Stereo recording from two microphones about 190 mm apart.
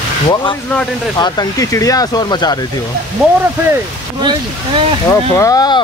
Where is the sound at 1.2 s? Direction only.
20° left (ahead or behind).